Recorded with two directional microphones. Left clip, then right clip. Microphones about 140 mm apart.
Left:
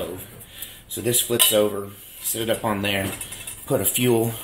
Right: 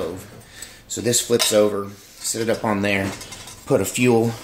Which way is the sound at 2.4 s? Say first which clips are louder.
Right 2 dB; 50° right (ahead or behind).